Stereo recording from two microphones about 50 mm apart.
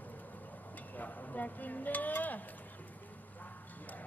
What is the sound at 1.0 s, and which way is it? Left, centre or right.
Speech, left.